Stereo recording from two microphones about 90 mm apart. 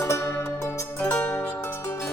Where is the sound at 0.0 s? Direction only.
30° left (ahead or behind).